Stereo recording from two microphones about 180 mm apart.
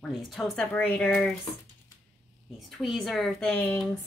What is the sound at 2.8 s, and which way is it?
A woman's voice, centre (ahead or behind).